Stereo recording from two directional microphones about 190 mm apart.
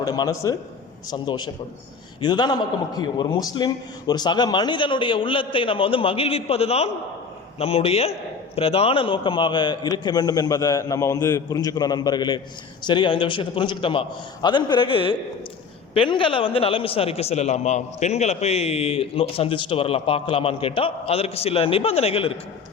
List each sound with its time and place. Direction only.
0.0 s a man's voice: 20° left (ahead or behind)